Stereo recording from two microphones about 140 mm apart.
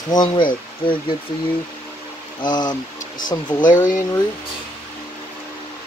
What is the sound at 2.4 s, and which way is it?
Speech, 30° left (ahead or behind).